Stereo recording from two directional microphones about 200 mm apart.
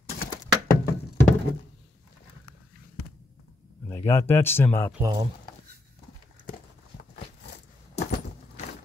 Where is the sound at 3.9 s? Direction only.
10° left (ahead or behind).